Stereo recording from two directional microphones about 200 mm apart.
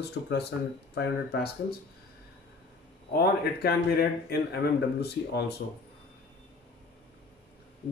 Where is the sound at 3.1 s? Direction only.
50° left (ahead or behind).